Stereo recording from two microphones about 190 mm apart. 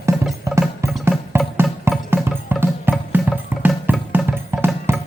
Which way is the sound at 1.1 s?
5° right (ahead or behind).